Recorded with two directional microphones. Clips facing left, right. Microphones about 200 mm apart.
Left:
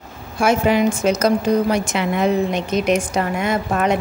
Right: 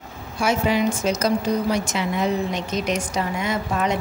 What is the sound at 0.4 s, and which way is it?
A woman's voice, 55° left (ahead or behind).